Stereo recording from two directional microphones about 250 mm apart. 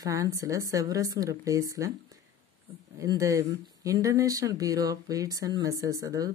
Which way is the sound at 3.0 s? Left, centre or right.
Centre.